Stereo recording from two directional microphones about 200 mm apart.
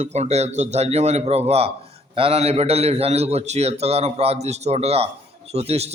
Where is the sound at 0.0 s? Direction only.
35° right (ahead or behind).